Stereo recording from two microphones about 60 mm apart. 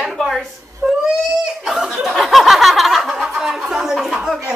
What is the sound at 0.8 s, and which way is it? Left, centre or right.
Baby cry, right.